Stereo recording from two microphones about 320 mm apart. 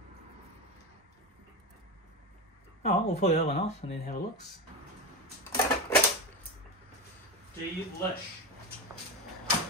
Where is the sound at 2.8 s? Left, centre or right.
Centre.